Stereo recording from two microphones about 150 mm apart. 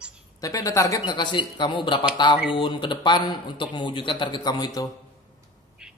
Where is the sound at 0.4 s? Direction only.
25° left (ahead or behind).